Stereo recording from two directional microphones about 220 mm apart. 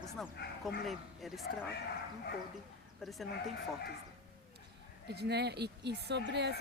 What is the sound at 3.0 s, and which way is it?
Speech, centre (ahead or behind).